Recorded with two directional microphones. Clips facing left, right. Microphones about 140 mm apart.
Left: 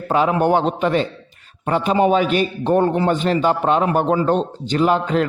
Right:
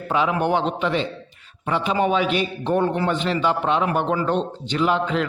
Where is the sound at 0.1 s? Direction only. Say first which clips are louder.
Left 4 dB; 45° left (ahead or behind).